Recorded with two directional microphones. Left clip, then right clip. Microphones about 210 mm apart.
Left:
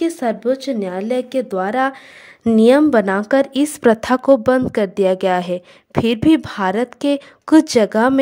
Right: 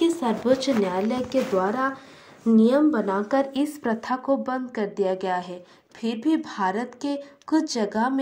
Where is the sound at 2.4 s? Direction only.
45° left (ahead or behind).